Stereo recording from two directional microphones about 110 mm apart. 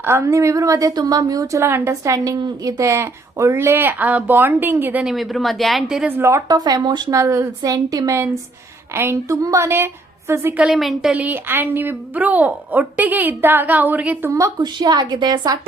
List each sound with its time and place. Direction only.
0.0 s a woman's voice: 25° right (ahead or behind)
5.0 s speech: centre (ahead or behind)
6.1 s a woman's voice: 20° right (ahead or behind)
6.6 s a woman's voice: 40° right (ahead or behind)
7.2 s a woman's voice: 30° right (ahead or behind)
10.8 s speech: centre (ahead or behind)
11.1 s a woman's voice: 15° right (ahead or behind)
14.3 s a woman's voice: 30° right (ahead or behind)
14.6 s a woman's voice: 40° right (ahead or behind)